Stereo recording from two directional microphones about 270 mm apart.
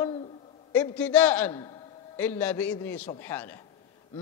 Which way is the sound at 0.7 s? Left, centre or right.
Centre.